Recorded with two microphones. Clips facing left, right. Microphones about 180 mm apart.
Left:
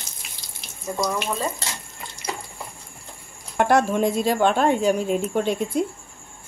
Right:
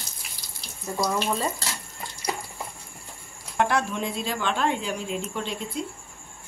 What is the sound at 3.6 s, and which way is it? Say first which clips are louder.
Speech: left 6 dB; 45° left (ahead or behind).